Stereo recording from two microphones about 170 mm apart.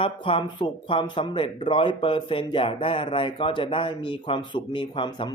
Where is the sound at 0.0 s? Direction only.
30° left (ahead or behind).